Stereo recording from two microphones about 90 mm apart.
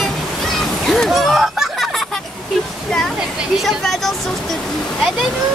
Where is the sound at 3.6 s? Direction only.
Centre (ahead or behind).